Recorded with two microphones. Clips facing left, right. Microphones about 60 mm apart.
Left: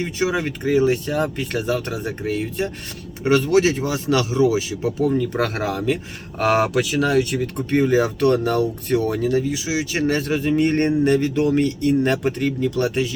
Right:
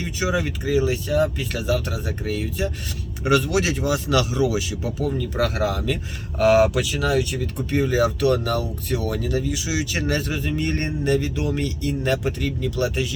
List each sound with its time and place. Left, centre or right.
0.0 s speech: left
9.0 s speech: left
10.8 s speech: left